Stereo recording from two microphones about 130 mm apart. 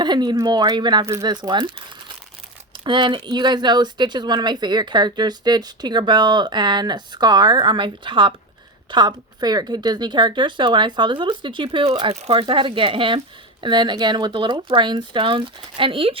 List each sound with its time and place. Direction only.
0.0 s speech: 35° right (ahead or behind)
1.0 s speech: 20° right (ahead or behind)
1.3 s speech: 35° right (ahead or behind)
2.8 s speech: 35° right (ahead or behind)